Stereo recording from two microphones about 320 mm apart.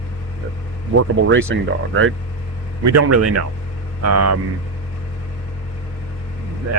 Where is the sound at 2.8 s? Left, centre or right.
Right.